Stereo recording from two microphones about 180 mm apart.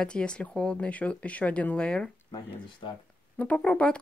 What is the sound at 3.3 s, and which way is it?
Speech, 5° left (ahead or behind).